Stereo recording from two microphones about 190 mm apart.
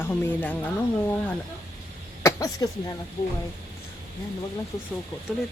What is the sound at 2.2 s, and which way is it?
Speech, 20° left (ahead or behind).